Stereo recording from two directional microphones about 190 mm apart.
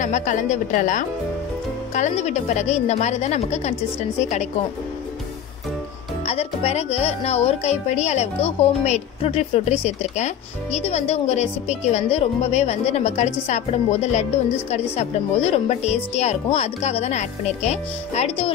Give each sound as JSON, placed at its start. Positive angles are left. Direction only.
{"t": 0.0, "sound": "speech", "side_deg": 40}
{"t": 6.2, "sound": "speech", "side_deg": 30}